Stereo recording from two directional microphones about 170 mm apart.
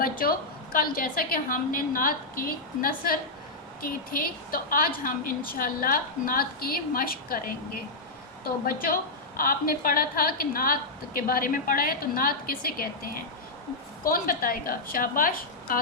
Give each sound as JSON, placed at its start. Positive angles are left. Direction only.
{"t": 0.0, "sound": "a woman's voice", "side_deg": 60}
{"t": 8.6, "sound": "a woman's voice", "side_deg": 55}
{"t": 14.0, "sound": "a woman's voice", "side_deg": 60}